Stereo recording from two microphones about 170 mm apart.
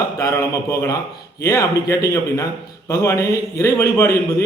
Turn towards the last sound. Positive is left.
turn(degrees=15)  # may be behind; listen again after turning